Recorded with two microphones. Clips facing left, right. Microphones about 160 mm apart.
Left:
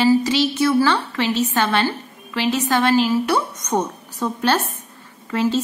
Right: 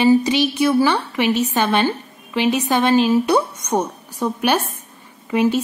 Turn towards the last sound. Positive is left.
turn(degrees=-15)  # may be behind; listen again after turning